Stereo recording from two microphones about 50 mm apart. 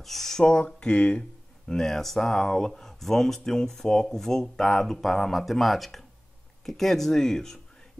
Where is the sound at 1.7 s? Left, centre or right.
Centre.